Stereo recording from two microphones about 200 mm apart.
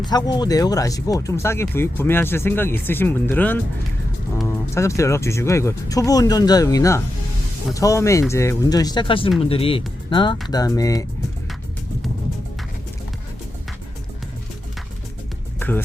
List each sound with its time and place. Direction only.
0.0 s speech: 20° left (ahead or behind)
15.5 s music: 10° left (ahead or behind)